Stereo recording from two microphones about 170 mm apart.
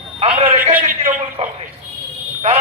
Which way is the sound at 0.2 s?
40° right (ahead or behind).